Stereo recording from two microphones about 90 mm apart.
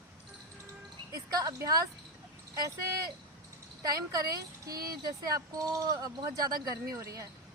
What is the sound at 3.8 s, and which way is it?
A woman's voice, 45° right (ahead or behind).